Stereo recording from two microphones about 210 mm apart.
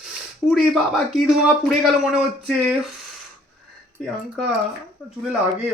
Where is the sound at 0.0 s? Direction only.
Centre (ahead or behind).